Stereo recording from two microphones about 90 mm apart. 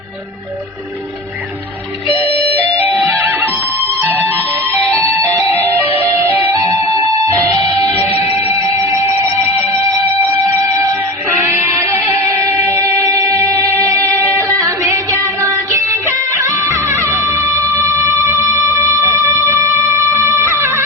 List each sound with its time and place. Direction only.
2.2 s music: 25° right (ahead or behind)
7.3 s music: 40° right (ahead or behind)
9.0 s music: 20° right (ahead or behind)